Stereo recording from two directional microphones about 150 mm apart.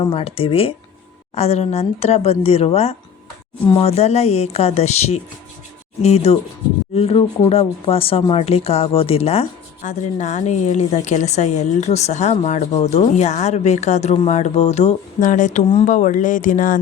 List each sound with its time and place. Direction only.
0.0 s speech: 40° left (ahead or behind); by 16.7 s 65° left (ahead or behind)